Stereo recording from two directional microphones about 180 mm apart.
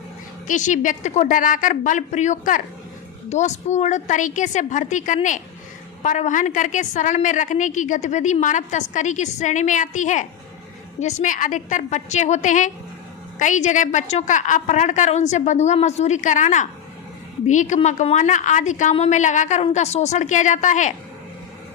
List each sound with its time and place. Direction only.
0.4 s a woman's voice: 45° left (ahead or behind)